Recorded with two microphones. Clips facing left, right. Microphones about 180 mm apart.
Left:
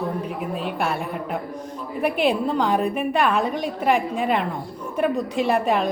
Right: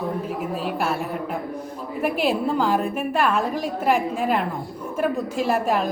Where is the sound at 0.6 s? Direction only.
Centre (ahead or behind).